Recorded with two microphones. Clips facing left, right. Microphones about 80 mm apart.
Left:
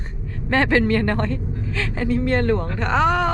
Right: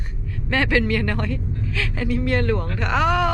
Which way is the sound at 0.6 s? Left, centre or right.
Left.